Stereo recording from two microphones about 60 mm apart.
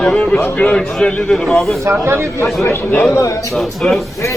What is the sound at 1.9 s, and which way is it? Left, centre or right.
Speech, right.